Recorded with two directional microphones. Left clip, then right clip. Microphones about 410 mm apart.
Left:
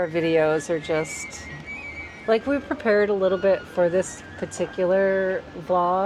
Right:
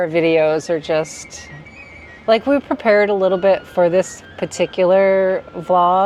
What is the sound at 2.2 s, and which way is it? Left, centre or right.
Speech, right.